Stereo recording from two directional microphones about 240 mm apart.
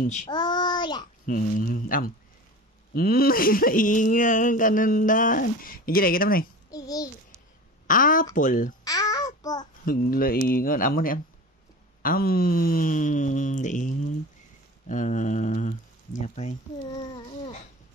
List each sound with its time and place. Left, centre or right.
0.0 s speech: left
0.3 s child singing: centre
1.2 s speech: left
6.7 s a sound: centre
7.8 s a woman's voice: left
8.8 s babbling: centre
9.8 s speech: left